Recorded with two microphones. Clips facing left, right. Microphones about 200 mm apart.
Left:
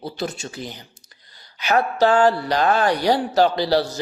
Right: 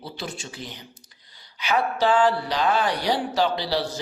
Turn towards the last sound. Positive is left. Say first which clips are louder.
# left 6 dB
turn(degrees=45)  # may be behind; listen again after turning